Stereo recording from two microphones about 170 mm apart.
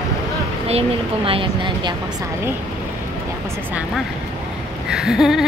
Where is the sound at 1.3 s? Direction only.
30° right (ahead or behind).